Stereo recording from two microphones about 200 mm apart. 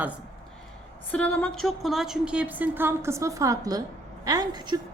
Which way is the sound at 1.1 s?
5° left (ahead or behind).